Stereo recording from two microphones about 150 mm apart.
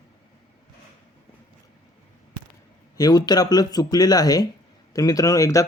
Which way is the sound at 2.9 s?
25° left (ahead or behind).